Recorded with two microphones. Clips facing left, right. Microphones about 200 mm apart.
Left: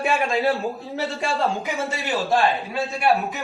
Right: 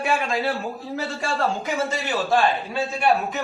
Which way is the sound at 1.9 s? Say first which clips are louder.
Left 1 dB; centre (ahead or behind).